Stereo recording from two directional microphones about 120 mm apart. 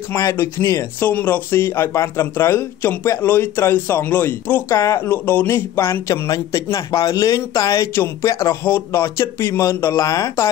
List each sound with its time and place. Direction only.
0.1 s speech: 25° left (ahead or behind)